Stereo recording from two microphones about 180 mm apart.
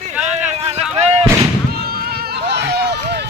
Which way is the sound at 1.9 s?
60° right (ahead or behind).